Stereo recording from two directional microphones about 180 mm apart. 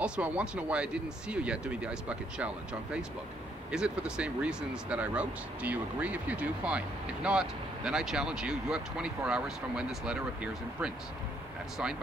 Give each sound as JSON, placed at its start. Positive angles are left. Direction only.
{"t": 0.0, "sound": "speech", "side_deg": -5}